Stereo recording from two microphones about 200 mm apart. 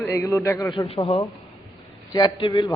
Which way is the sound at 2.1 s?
20° left (ahead or behind).